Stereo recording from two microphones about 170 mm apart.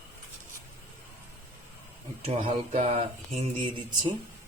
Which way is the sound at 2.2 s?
35° right (ahead or behind).